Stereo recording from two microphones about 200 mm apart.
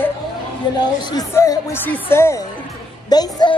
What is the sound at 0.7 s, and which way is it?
Speech, 20° left (ahead or behind).